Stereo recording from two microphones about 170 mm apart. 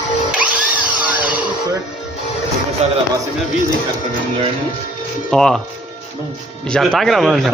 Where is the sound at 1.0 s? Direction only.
10° right (ahead or behind).